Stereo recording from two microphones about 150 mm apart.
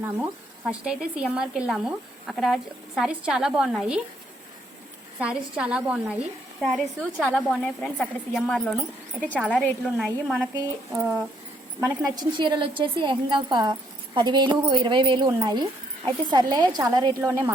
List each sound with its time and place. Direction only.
0.7 s a woman's voice: 5° right (ahead or behind)
5.2 s a woman's voice: 5° right (ahead or behind)
10.5 s speech: 20° right (ahead or behind)
12.1 s a woman's voice: 30° right (ahead or behind)